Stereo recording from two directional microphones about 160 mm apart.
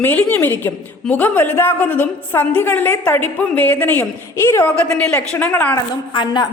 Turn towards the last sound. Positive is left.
turn(degrees=30)  # may be behind; listen again after turning